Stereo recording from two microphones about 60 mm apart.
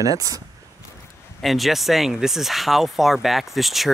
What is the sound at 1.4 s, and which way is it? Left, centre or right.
Speech, centre.